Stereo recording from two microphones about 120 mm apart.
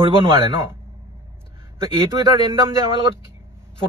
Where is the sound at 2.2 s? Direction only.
35° right (ahead or behind).